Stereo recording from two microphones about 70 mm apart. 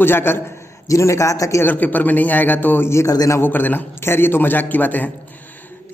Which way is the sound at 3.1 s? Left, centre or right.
Left.